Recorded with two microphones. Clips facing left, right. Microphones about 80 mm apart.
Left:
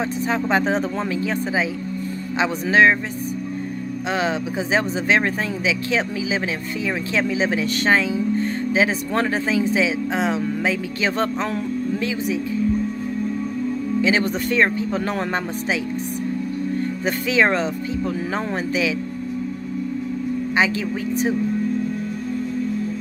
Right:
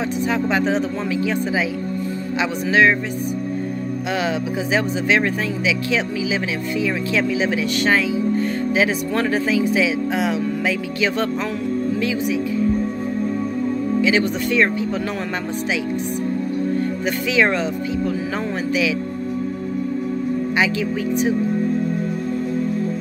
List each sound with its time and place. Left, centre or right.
0.3 s speech: left
4.1 s speech: left
14.0 s speech: left
17.0 s speech: left